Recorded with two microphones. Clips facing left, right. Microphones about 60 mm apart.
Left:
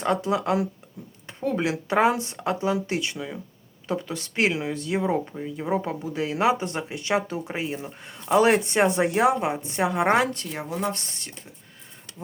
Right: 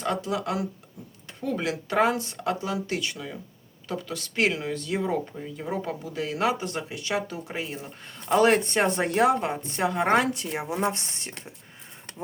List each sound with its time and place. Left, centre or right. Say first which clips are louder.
0.0 s speech: left 4 dB; left
1.3 s a sound: left 3 dB; left
1.5 s a woman's voice: left 1 dB; centre
10.5 s speech: right 1 dB; centre